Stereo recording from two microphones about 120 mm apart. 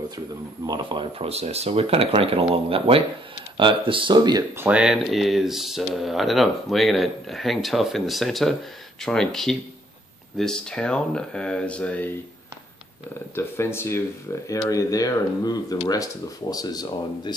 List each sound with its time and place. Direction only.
0.7 s speech: 40° right (ahead or behind)
4.6 s speech: 10° right (ahead or behind); by 12.1 s 10° left (ahead or behind)
13.3 s speech: 20° left (ahead or behind)